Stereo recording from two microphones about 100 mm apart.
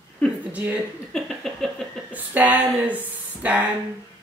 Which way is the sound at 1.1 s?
5° left (ahead or behind).